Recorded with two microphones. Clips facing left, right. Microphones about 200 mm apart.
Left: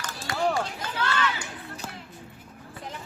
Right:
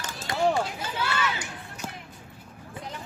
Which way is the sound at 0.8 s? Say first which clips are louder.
Left 1 dB; 10° right (ahead or behind).